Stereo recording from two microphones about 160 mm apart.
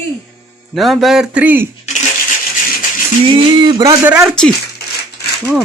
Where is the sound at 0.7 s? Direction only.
Centre (ahead or behind).